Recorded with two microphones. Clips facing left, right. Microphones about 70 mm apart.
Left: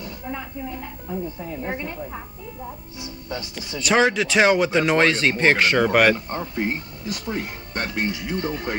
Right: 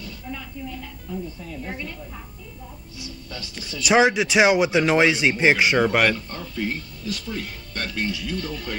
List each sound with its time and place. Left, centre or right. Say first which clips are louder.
0.0 s a woman's voice: left 4 dB; left
3.8 s speech: right 1 dB; centre
6.1 s speech: left 4 dB; left